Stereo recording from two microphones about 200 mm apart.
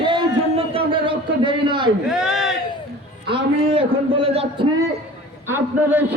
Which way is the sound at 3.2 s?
25° right (ahead or behind).